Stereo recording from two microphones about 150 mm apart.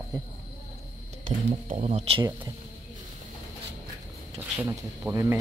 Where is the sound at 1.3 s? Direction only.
50° right (ahead or behind); by 2.5 s 35° right (ahead or behind).